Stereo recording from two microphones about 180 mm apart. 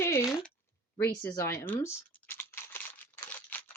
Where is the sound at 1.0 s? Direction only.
10° left (ahead or behind).